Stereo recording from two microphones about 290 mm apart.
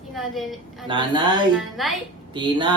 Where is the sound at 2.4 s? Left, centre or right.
Centre.